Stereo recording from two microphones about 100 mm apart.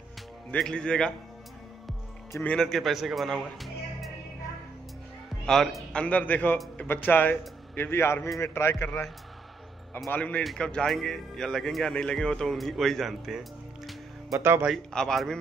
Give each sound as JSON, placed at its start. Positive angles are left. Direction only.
{"t": 0.6, "sound": "a man's voice", "side_deg": 10}
{"t": 2.4, "sound": "speech", "side_deg": 5}
{"t": 5.4, "sound": "speech", "side_deg": 5}
{"t": 5.9, "sound": "a man's voice", "side_deg": 15}
{"t": 10.0, "sound": "a man's voice", "side_deg": 15}
{"t": 14.3, "sound": "speech", "side_deg": -25}
{"t": 14.9, "sound": "a man's voice", "side_deg": 5}